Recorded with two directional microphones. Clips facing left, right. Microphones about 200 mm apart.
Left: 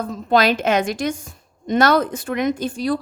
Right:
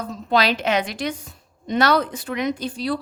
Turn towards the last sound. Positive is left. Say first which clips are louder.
# left 3 dB
turn(degrees=45)  # may be behind; listen again after turning